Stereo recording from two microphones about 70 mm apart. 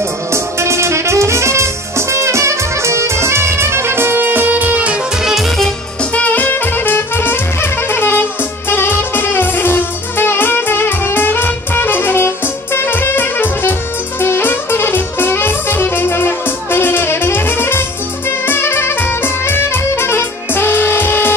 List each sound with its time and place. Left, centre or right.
0.3 s music: right
5.2 s music: centre
6.1 s music: left